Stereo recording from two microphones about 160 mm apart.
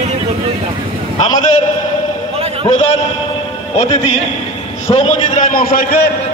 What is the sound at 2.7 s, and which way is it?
Speech, 45° left (ahead or behind).